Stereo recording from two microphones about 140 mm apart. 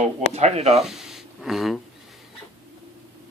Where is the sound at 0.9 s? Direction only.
5° right (ahead or behind).